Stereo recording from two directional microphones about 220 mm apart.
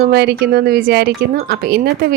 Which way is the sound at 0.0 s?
50° right (ahead or behind).